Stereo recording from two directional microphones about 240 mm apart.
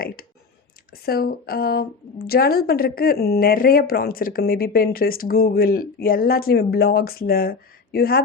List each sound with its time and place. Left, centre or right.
1.0 s a woman's voice: left